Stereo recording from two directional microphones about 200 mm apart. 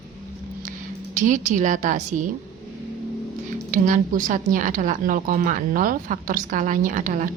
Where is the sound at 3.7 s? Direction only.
40° right (ahead or behind).